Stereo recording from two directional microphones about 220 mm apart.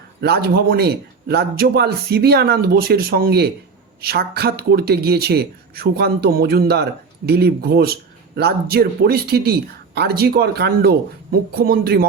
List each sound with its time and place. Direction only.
0.2 s speech: 45° right (ahead or behind)